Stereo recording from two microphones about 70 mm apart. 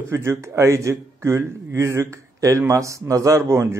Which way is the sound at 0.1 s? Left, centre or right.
Right.